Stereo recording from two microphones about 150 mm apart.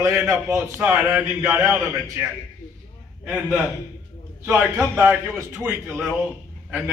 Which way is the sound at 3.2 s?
5° right (ahead or behind).